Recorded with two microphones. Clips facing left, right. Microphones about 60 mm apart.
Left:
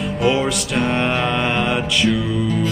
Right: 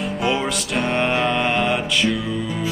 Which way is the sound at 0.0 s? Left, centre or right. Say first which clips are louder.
Left 3 dB; centre.